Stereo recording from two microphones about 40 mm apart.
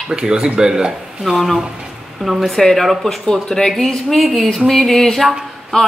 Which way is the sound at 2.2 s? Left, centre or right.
Centre.